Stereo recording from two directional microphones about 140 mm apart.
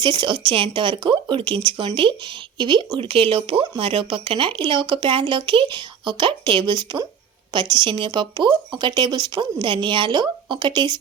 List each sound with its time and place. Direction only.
0.0 s speech: 35° right (ahead or behind)